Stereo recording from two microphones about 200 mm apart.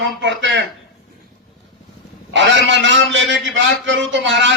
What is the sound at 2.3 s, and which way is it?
A man's voice, 65° right (ahead or behind).